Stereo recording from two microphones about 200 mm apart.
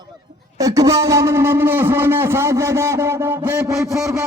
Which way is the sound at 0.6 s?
15° right (ahead or behind).